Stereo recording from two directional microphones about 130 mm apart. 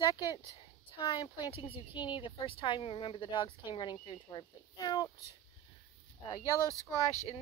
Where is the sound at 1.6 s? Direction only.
45° left (ahead or behind).